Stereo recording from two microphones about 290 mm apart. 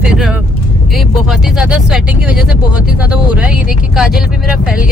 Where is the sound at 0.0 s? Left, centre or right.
Centre.